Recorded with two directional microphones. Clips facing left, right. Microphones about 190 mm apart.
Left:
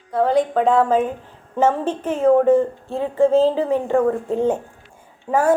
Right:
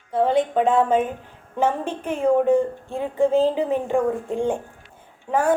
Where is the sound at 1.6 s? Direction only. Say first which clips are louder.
Left 4 dB; 10° right (ahead or behind).